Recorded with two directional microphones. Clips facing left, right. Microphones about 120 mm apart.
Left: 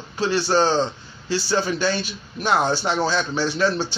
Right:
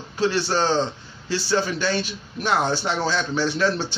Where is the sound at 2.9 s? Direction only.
15° left (ahead or behind).